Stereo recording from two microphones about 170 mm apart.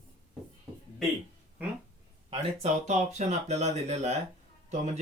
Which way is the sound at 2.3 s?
40° right (ahead or behind).